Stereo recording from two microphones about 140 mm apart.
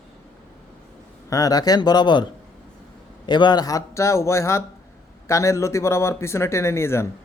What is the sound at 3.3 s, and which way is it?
A man's voice, 35° left (ahead or behind).